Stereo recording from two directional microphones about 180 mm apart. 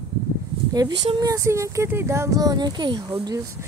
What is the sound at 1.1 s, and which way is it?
Speech, 20° right (ahead or behind).